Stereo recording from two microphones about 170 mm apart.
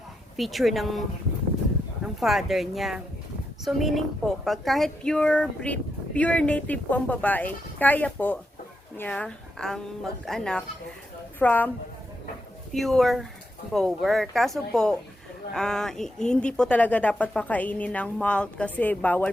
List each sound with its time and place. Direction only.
0.3 s a woman's voice: centre (ahead or behind)
2.2 s a woman's voice: centre (ahead or behind)
12.7 s a woman's voice: centre (ahead or behind)